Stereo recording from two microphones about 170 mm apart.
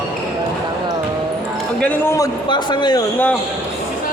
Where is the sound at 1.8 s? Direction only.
10° left (ahead or behind).